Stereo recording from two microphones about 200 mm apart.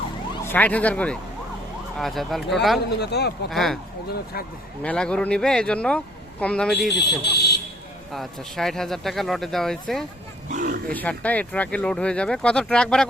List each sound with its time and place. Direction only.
0.4 s speech: 10° left (ahead or behind)
3.0 s speech: 55° left (ahead or behind)
3.5 s speech: centre (ahead or behind)
4.8 s speech: 5° left (ahead or behind)
6.9 s speech: 55° left (ahead or behind)
8.1 s speech: centre (ahead or behind)
10.5 s speech: 45° right (ahead or behind)
10.9 s speech: 5° left (ahead or behind)